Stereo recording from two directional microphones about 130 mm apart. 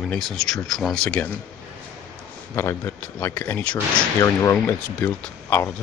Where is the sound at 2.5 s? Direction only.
20° left (ahead or behind).